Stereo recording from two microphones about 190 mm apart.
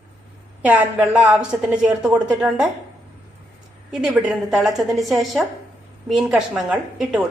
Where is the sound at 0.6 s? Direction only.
10° right (ahead or behind).